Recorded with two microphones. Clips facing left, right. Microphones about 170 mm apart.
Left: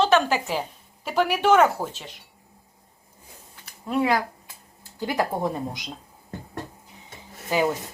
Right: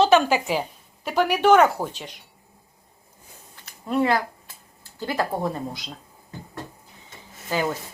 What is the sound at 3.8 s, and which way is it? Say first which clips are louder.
Speech: right 1 dB; 10° left (ahead or behind).